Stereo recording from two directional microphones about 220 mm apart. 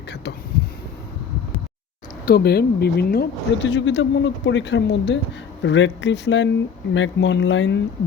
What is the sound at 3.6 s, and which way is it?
Speech, 55° left (ahead or behind).